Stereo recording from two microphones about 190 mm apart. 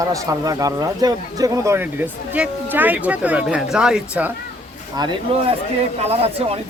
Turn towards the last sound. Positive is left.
turn(degrees=-30)  # may be behind; listen again after turning